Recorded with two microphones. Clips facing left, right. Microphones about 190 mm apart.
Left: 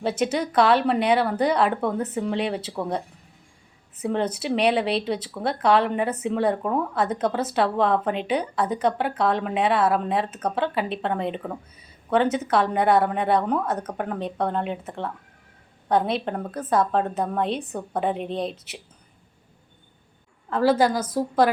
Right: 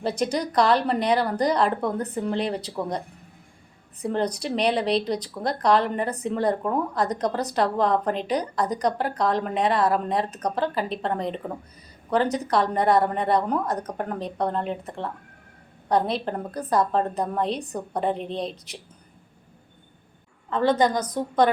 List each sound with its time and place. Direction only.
0.0 s a woman's voice: 5° left (ahead or behind)
3.9 s a woman's voice: 5° left (ahead or behind)
20.5 s a woman's voice: 5° left (ahead or behind)